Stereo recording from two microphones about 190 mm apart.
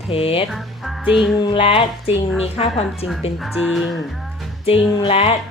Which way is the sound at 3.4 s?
Centre (ahead or behind).